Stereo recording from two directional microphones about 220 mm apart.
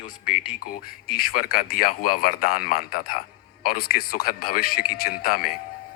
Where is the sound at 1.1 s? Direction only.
40° left (ahead or behind).